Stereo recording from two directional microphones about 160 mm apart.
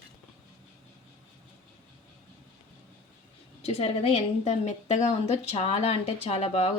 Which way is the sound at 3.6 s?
40° left (ahead or behind).